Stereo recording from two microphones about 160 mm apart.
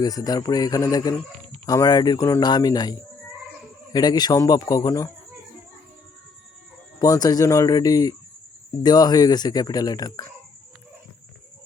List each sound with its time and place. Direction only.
0.0 s speech: 25° left (ahead or behind)
3.9 s speech: 25° left (ahead or behind)
7.0 s speech: 20° left (ahead or behind)